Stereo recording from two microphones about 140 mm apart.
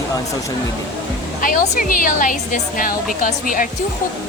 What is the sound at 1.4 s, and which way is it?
A woman's voice, 75° left (ahead or behind).